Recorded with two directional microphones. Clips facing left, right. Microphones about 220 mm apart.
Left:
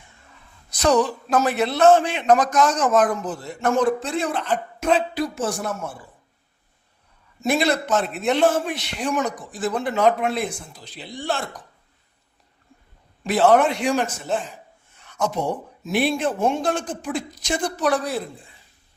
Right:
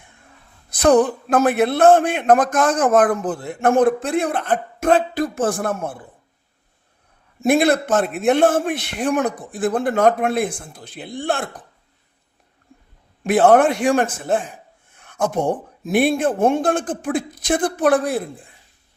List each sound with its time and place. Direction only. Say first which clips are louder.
0.7 s a man's voice: right 5 dB; 55° right (ahead or behind)
7.4 s a man's voice: right 5 dB; 55° right (ahead or behind)
13.2 s a man's voice: right 3 dB; 50° right (ahead or behind)